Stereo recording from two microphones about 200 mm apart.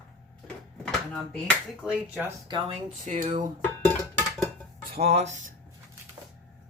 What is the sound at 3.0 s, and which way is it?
Speech, 35° right (ahead or behind).